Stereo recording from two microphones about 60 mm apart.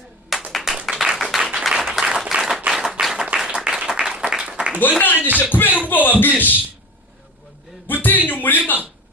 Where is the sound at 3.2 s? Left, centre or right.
Centre.